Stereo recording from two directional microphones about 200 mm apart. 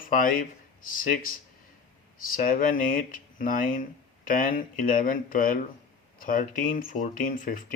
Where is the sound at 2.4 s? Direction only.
45° left (ahead or behind).